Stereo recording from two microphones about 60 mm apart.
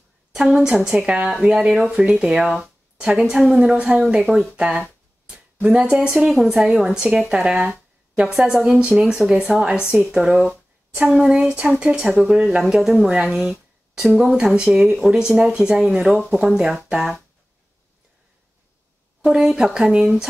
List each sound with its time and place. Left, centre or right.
0.3 s a woman's voice: centre
2.6 s a sound: right
3.3 s speech: centre
5.2 s a sound: centre
6.1 s speech: centre
19.2 s speech: centre